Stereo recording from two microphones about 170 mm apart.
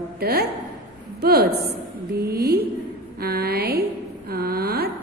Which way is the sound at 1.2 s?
65° right (ahead or behind).